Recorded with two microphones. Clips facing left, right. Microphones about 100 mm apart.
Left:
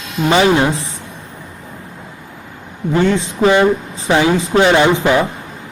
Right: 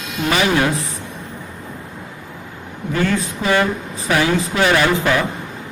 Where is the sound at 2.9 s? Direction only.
25° left (ahead or behind).